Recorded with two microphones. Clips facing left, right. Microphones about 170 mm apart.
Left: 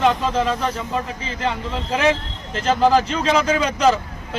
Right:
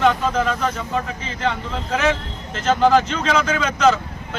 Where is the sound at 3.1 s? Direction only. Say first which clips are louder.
Left 2 dB; 35° left (ahead or behind).